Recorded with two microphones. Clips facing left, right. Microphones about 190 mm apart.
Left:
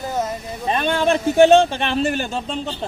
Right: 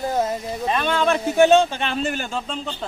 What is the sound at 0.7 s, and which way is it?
A man's voice, 25° left (ahead or behind).